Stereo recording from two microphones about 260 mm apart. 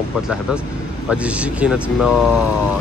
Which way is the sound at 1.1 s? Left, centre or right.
Centre.